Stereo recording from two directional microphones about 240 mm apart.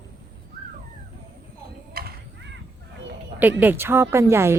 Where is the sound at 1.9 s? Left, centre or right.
Right.